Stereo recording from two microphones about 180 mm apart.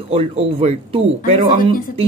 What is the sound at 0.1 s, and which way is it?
Speech, 35° right (ahead or behind).